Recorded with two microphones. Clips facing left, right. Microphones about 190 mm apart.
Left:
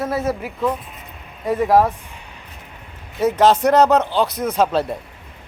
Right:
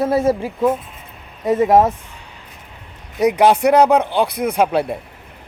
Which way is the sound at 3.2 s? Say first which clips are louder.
Right 2 dB; 15° right (ahead or behind).